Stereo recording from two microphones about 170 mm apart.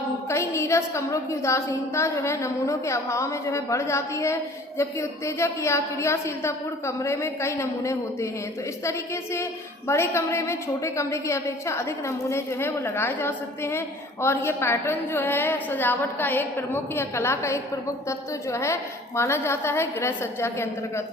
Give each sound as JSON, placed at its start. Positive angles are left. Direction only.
{"t": 0.3, "sound": "a woman's voice", "side_deg": 15}